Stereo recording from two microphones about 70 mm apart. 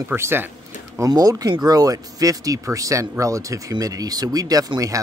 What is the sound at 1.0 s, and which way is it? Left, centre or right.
Speech, right.